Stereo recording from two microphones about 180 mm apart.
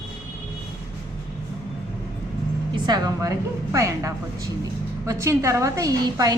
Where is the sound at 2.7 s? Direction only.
20° right (ahead or behind).